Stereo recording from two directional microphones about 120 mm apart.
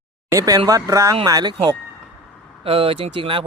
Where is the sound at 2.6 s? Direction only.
50° right (ahead or behind).